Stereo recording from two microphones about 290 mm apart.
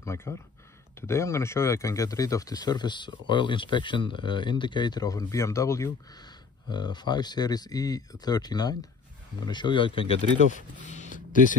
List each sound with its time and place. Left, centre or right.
0.0 s speech: centre